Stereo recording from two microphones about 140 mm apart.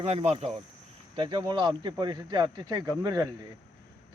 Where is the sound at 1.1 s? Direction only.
35° right (ahead or behind).